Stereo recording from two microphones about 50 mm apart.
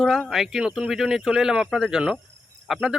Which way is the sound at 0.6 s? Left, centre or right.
Right.